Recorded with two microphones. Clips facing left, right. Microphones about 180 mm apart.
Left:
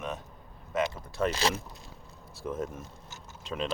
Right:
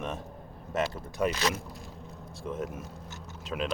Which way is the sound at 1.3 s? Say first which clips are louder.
Left 1 dB; 30° left (ahead or behind).